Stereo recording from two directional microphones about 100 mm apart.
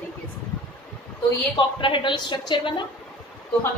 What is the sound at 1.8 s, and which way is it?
A woman's voice, 55° left (ahead or behind).